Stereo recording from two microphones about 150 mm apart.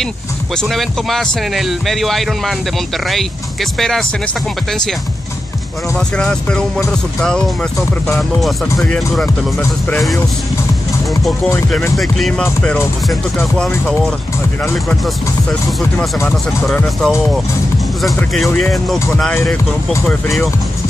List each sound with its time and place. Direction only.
0.6 s speech: centre (ahead or behind)
3.7 s speech: 5° left (ahead or behind)
5.9 s speech: 5° left (ahead or behind)
9.6 s speech: 15° left (ahead or behind)
12.0 s speech: 5° left (ahead or behind)
14.6 s speech: 10° left (ahead or behind)
16.6 s speech: centre (ahead or behind)
20.1 s speech: 5° left (ahead or behind)